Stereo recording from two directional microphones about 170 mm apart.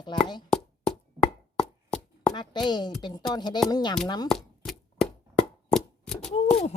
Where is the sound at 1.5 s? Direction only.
5° left (ahead or behind).